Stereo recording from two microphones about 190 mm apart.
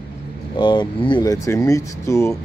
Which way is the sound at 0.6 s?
25° left (ahead or behind).